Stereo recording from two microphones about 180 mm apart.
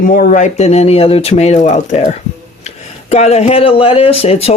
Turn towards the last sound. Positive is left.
turn(degrees=35)  # may be behind; listen again after turning